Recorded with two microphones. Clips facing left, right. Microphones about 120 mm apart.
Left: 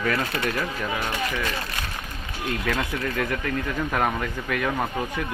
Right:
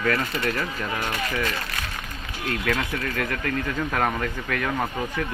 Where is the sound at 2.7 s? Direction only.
15° left (ahead or behind).